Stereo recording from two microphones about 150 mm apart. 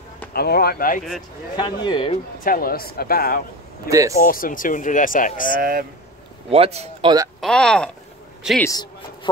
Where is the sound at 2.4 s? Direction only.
75° left (ahead or behind).